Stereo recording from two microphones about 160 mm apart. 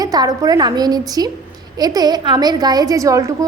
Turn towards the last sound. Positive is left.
turn(degrees=-20)  # may be behind; listen again after turning